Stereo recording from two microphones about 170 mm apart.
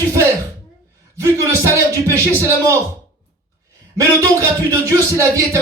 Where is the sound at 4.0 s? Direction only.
20° right (ahead or behind).